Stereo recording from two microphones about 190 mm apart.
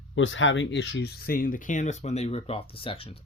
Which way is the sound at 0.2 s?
90° left.